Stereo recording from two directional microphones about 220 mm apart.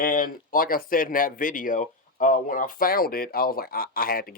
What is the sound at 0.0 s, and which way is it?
Speech, 40° left (ahead or behind).